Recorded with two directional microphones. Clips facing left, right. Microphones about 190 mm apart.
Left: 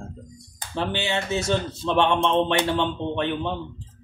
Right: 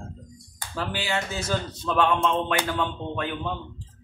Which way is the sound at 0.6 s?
25° left (ahead or behind).